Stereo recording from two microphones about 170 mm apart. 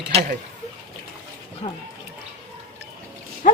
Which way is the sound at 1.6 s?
40° left (ahead or behind).